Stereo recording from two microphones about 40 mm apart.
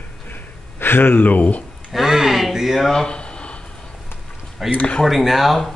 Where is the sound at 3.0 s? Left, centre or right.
Left.